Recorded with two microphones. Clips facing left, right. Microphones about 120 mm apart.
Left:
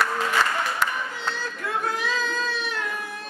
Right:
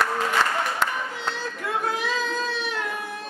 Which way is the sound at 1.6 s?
Centre (ahead or behind).